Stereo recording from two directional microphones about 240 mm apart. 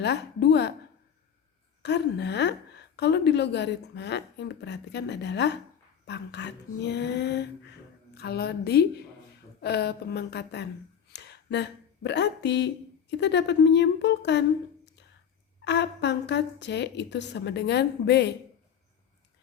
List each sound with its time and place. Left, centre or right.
0.0 s a woman's voice: left
1.8 s a woman's voice: left
15.6 s a woman's voice: left